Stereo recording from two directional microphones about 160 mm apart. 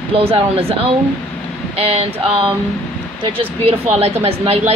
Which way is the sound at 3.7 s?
40° right (ahead or behind).